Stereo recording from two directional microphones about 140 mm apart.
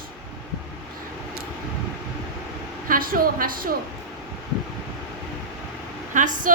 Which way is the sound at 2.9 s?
85° right.